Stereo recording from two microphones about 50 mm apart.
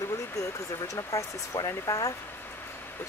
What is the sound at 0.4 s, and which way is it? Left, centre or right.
Speech, left.